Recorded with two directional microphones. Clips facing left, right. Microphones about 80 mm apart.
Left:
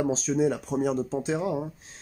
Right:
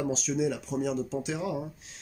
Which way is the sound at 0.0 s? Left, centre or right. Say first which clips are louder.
Left 4 dB; left.